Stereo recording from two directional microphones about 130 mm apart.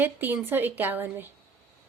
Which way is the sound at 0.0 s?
15° right (ahead or behind).